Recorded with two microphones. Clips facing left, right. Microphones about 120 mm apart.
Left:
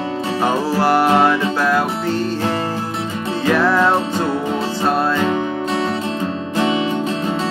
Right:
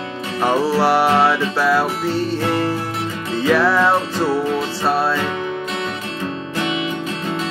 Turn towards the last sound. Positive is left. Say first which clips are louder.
# left 4 dB
turn(degrees=30)  # may be behind; listen again after turning